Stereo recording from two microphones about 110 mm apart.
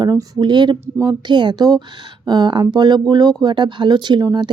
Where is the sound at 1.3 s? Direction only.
40° right (ahead or behind).